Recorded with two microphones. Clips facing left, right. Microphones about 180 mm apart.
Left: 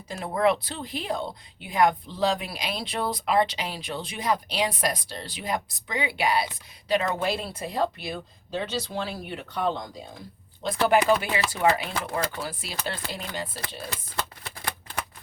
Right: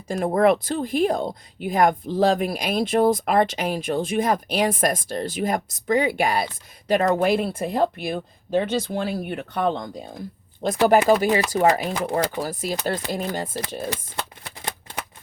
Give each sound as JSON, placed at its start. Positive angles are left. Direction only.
{"t": 0.1, "sound": "speech", "side_deg": -50}
{"t": 10.8, "sound": "speech", "side_deg": -40}